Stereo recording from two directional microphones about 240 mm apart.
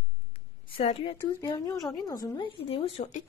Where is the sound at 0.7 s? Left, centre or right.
Left.